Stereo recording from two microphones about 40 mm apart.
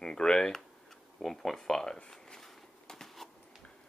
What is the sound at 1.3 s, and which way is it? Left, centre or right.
Speech, centre.